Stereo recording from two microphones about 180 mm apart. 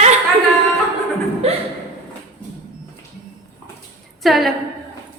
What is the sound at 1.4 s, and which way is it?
Chuckle, 35° right (ahead or behind).